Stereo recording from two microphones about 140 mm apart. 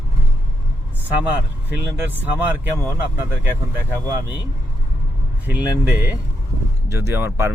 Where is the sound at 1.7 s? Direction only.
10° right (ahead or behind).